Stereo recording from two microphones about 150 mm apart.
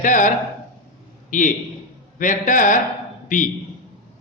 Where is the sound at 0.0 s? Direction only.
60° left (ahead or behind).